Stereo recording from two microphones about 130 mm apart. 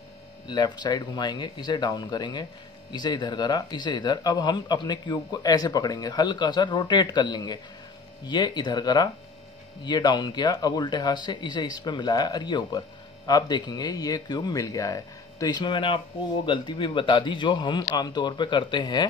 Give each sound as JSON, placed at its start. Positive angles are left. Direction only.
{"t": 0.5, "sound": "speech", "side_deg": 35}